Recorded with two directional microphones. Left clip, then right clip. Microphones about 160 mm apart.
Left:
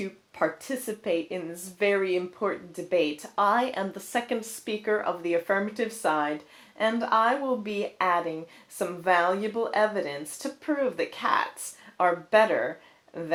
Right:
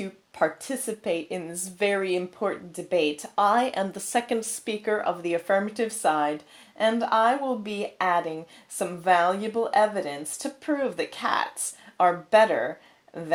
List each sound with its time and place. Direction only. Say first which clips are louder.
0.0 s a woman's voice: right 2 dB; 30° right (ahead or behind)